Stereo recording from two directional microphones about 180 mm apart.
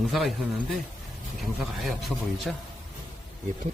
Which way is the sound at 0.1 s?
Centre (ahead or behind).